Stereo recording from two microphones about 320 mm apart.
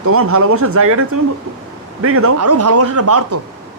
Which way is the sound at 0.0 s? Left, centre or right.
Right.